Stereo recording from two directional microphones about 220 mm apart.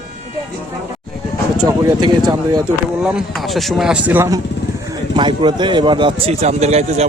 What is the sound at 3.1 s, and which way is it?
A man's voice, centre (ahead or behind).